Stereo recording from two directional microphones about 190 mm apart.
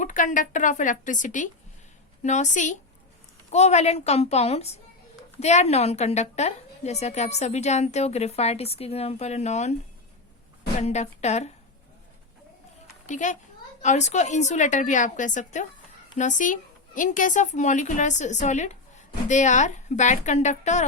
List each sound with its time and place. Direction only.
0.0 s a woman's voice: 40° left (ahead or behind)
10.8 s a woman's voice: 35° left (ahead or behind)
13.1 s a child's voice: 40° left (ahead or behind)